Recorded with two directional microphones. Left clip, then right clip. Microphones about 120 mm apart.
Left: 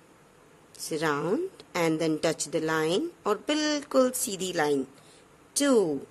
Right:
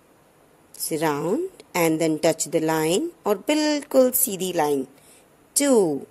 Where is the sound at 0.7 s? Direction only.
30° right (ahead or behind).